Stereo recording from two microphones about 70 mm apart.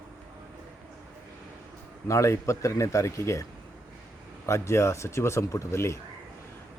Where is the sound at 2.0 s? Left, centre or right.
Left.